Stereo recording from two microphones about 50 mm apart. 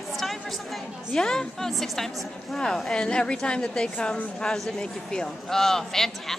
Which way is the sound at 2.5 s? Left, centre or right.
Centre.